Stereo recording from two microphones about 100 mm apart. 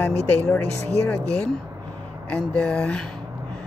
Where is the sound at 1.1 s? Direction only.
10° left (ahead or behind).